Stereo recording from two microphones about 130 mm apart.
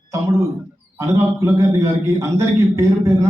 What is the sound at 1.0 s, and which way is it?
A man's voice, 25° right (ahead or behind).